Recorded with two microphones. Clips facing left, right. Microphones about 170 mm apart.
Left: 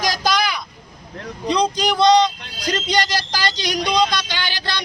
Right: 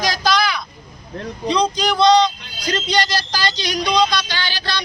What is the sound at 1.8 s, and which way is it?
Speech, 15° left (ahead or behind).